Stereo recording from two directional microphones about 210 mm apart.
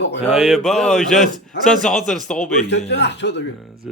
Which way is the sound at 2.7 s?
55° left (ahead or behind).